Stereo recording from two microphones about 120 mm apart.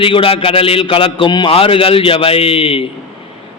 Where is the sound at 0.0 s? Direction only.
50° left (ahead or behind).